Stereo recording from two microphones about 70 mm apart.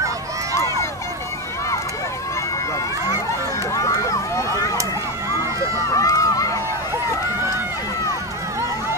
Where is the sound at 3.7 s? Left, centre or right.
Left.